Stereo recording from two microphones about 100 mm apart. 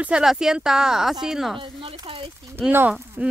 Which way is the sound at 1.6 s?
60° right (ahead or behind).